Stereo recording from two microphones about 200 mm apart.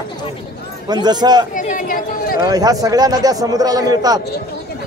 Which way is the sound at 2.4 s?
20° right (ahead or behind).